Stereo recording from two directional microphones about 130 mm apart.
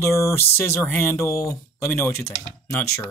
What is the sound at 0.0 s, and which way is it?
Speech, 20° left (ahead or behind).